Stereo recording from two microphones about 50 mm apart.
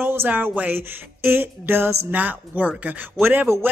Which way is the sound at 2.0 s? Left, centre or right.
Right.